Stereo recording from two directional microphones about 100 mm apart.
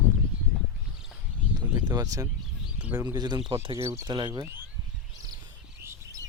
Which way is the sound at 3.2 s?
50° right (ahead or behind).